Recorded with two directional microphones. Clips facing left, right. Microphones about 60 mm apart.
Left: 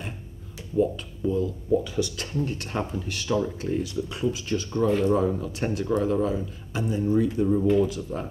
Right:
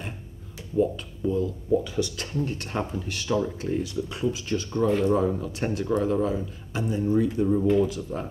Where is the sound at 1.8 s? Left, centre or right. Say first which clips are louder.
Even; right.